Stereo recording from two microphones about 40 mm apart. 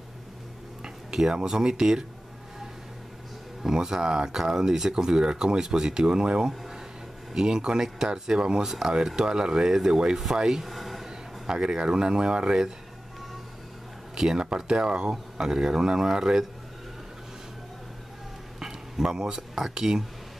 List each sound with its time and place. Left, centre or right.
0.8 s a sound: centre
1.3 s speech: centre
3.7 s speech: centre
10.6 s a sound: centre
11.1 s speech: centre
14.1 s speech: centre
18.6 s speech: centre